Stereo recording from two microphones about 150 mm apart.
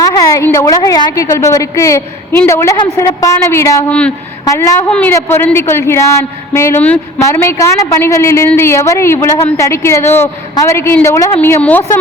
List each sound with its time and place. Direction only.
0.0 s a sound: 20° left (ahead or behind)
0.4 s a woman's voice: 20° left (ahead or behind)
4.9 s a woman's voice: 5° left (ahead or behind)